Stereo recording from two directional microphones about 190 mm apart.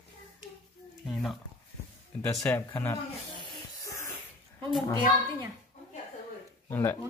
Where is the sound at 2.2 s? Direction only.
15° left (ahead or behind).